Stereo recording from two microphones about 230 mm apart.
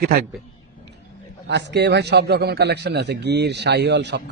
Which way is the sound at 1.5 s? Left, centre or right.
Right.